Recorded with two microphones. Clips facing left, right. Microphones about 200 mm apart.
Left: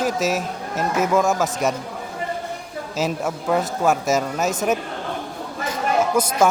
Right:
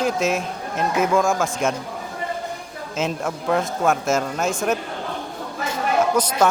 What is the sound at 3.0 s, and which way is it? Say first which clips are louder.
A man's voice: left 1 dB; 5° left (ahead or behind).